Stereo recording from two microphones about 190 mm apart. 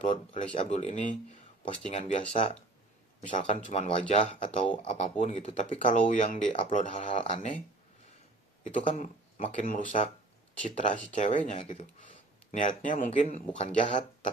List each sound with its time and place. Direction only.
0.0 s speech: 40° left (ahead or behind)
8.6 s speech: 40° left (ahead or behind)